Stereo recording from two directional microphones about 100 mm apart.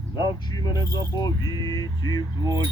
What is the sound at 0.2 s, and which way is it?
Speech, 40° left (ahead or behind).